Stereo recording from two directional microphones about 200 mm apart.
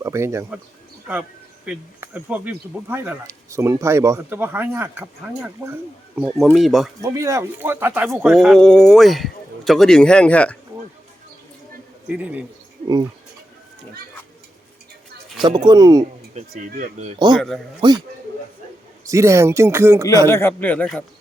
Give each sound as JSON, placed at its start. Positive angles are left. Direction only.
{"t": 0.0, "sound": "speech", "side_deg": -15}
{"t": 1.6, "sound": "speech", "side_deg": -5}
{"t": 7.0, "sound": "speech", "side_deg": -15}
{"t": 12.0, "sound": "speech", "side_deg": -5}
{"t": 15.4, "sound": "speech", "side_deg": -20}
{"t": 16.3, "sound": "speech", "side_deg": -40}
{"t": 17.3, "sound": "speech", "side_deg": 0}
{"t": 17.7, "sound": "speech", "side_deg": -20}
{"t": 19.0, "sound": "speech", "side_deg": -15}
{"t": 20.1, "sound": "a man's voice", "side_deg": 15}